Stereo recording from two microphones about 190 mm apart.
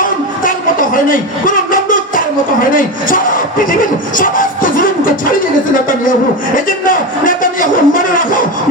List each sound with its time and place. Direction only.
0.0 s music: 45° left (ahead or behind)
2.7 s speech: 45° left (ahead or behind)
4.2 s music: 45° left (ahead or behind)
6.7 s a man's voice: 45° left (ahead or behind)